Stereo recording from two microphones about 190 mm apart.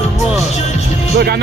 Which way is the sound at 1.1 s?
55° right (ahead or behind).